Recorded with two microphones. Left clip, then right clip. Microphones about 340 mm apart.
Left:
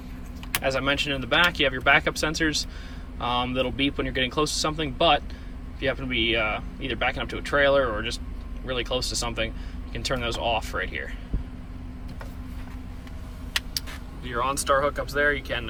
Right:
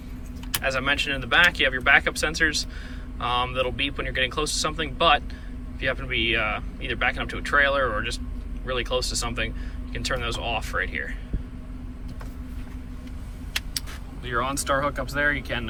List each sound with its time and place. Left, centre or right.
0.5 s speech: centre
14.3 s speech: centre